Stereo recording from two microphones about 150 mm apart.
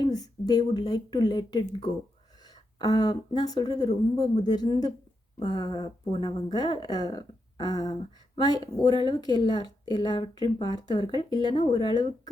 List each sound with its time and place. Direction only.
0.0 s speech: 25° left (ahead or behind)
2.7 s a woman's voice: 25° left (ahead or behind)